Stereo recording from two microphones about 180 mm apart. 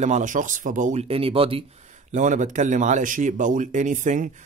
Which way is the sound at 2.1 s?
45° right (ahead or behind).